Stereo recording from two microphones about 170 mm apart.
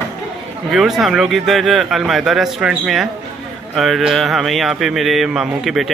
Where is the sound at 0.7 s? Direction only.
Centre (ahead or behind).